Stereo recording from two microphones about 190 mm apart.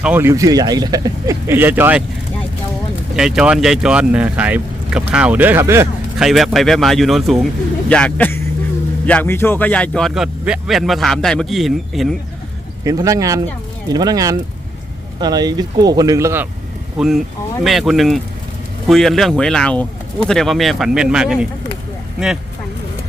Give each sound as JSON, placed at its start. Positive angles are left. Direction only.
{"t": 0.0, "sound": "speech", "side_deg": -10}
{"t": 3.2, "sound": "speech", "side_deg": -5}
{"t": 6.1, "sound": "speech", "side_deg": 0}
{"t": 12.8, "sound": "speech", "side_deg": -15}
{"t": 17.6, "sound": "speech", "side_deg": 0}